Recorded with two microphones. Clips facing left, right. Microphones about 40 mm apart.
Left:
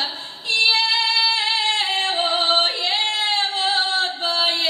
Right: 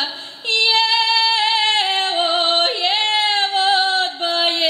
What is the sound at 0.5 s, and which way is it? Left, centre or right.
Female singing, right.